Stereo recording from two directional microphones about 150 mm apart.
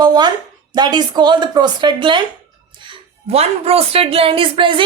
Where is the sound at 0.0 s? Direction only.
30° right (ahead or behind).